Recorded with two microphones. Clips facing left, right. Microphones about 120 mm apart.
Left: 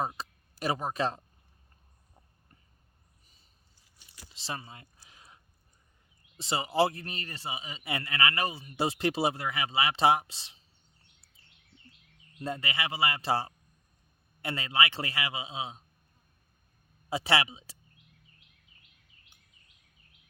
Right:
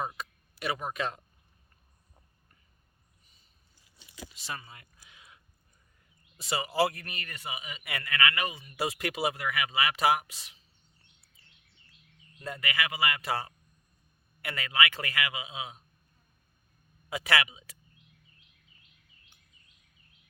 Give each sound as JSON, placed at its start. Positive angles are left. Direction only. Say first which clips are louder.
{"t": 0.0, "sound": "speech", "louder": "left 2 dB", "side_deg": 35}
{"t": 4.3, "sound": "a sound", "louder": "left 3 dB", "side_deg": 25}
{"t": 6.3, "sound": "a man's voice", "louder": "left 1 dB", "side_deg": 25}
{"t": 12.4, "sound": "a man's voice", "louder": "even", "side_deg": 30}
{"t": 17.1, "sound": "a man's voice", "louder": "left 1 dB", "side_deg": 30}